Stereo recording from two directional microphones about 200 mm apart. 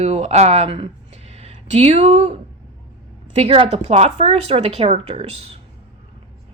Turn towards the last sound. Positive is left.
turn(degrees=-30)  # may be behind; listen again after turning